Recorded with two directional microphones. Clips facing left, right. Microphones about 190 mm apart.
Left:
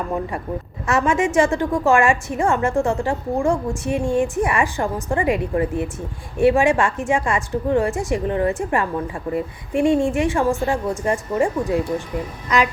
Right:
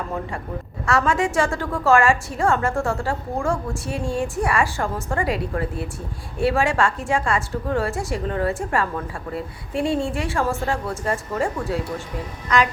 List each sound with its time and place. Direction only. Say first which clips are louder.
0.9 s a woman's voice: left 2 dB; 15° left (ahead or behind)